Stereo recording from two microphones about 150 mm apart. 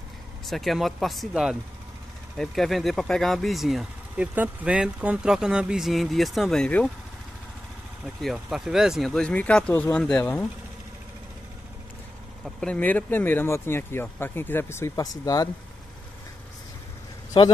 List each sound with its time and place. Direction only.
0.5 s speech: centre (ahead or behind)
8.0 s speech: centre (ahead or behind)
12.4 s speech: 5° left (ahead or behind); by 15.5 s 25° left (ahead or behind)
17.3 s a man's voice: 35° left (ahead or behind)